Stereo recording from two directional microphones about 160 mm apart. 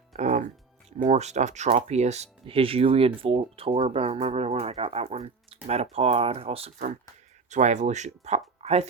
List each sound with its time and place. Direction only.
0.1 s music: 50° right (ahead or behind)
1.0 s speech: 45° right (ahead or behind)